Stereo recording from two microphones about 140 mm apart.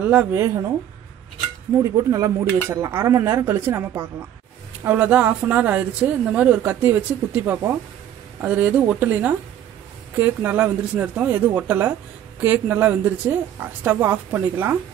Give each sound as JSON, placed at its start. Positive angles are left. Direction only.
{"t": 0.0, "sound": "a woman's voice", "side_deg": -10}
{"t": 1.8, "sound": "a woman's voice", "side_deg": -25}